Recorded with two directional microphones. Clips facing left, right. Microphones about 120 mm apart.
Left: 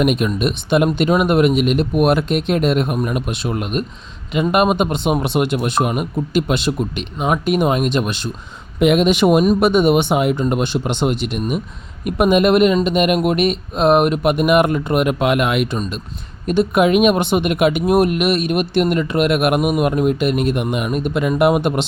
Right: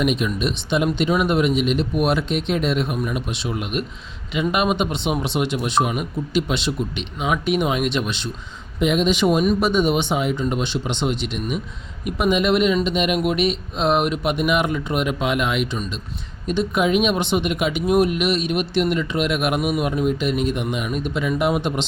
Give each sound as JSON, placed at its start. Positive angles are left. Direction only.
{"t": 0.0, "sound": "speech", "side_deg": 55}
{"t": 8.8, "sound": "speech", "side_deg": 65}